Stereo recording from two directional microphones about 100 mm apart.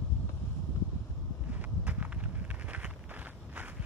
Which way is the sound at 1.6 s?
15° right (ahead or behind).